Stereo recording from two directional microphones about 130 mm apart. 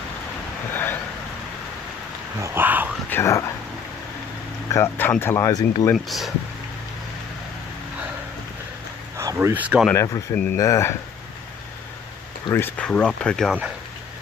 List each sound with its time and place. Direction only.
2.4 s speech: 15° right (ahead or behind)
3.1 s speech: 20° left (ahead or behind)
4.6 s speech: 20° left (ahead or behind)
5.9 s speech: centre (ahead or behind)
9.1 s speech: 25° right (ahead or behind)
9.9 s speech: 25° left (ahead or behind)
10.3 s speech: 15° left (ahead or behind)
12.4 s speech: 15° left (ahead or behind)